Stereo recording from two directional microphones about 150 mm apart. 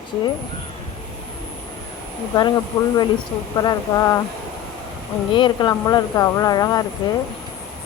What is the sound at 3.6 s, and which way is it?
Speech, 25° left (ahead or behind).